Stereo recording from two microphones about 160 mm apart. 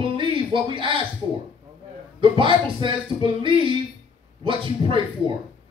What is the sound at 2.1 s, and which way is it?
Speech, 30° right (ahead or behind).